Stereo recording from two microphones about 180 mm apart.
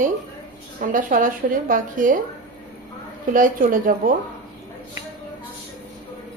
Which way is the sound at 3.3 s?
50° right (ahead or behind).